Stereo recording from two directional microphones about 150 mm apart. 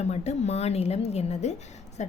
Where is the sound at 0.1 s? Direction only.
45° left (ahead or behind).